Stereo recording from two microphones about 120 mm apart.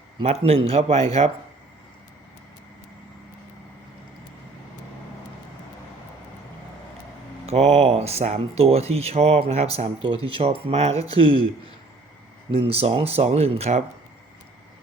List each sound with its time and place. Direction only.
0.2 s speech: 55° right (ahead or behind)
7.4 s speech: 60° right (ahead or behind)
12.5 s speech: 55° right (ahead or behind)